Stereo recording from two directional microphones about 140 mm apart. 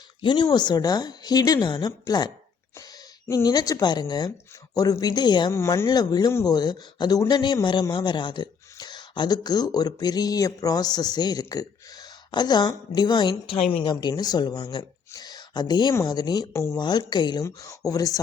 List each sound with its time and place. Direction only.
0.2 s speech: 35° left (ahead or behind)
5.5 s speech: 20° left (ahead or behind)
13.5 s speech: 45° left (ahead or behind); by 16.7 s 20° left (ahead or behind)
16.7 s speech: 30° left (ahead or behind)